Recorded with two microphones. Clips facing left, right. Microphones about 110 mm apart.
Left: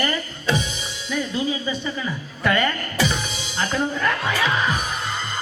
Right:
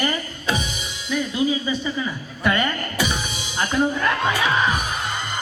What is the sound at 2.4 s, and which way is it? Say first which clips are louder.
Music: left 1 dB; 15° right (ahead or behind).